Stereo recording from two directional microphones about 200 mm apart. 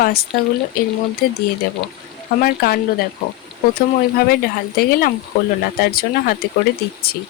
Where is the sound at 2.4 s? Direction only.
50° left (ahead or behind).